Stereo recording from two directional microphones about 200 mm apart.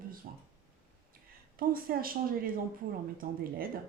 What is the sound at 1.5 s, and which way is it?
A woman's voice, 45° right (ahead or behind).